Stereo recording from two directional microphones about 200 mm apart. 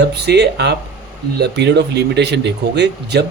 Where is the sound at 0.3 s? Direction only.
55° right (ahead or behind).